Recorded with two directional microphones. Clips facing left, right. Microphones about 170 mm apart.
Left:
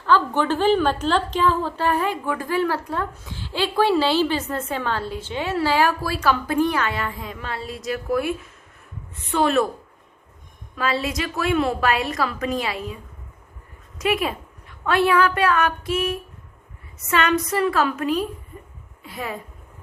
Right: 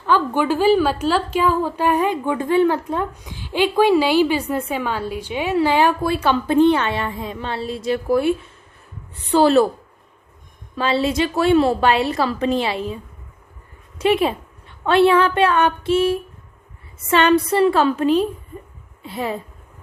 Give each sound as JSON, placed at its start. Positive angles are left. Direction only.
{"t": 0.0, "sound": "a woman's voice", "side_deg": -10}
{"t": 10.8, "sound": "a woman's voice", "side_deg": -30}
{"t": 14.0, "sound": "a woman's voice", "side_deg": -30}